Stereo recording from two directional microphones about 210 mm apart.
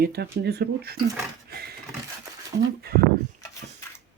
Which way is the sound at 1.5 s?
45° right (ahead or behind).